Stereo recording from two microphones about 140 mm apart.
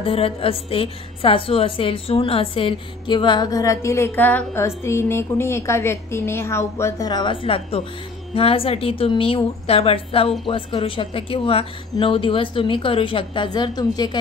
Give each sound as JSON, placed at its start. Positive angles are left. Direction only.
{"t": 0.0, "sound": "a woman's voice", "side_deg": 40}